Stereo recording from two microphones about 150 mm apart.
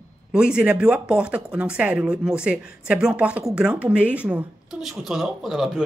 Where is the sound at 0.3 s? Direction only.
5° right (ahead or behind).